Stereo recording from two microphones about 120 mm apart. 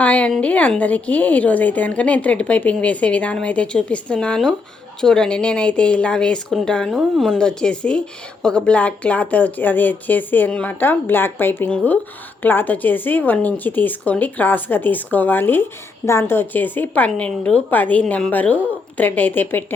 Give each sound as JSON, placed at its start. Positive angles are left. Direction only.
{"t": 0.0, "sound": "a woman's voice", "side_deg": 10}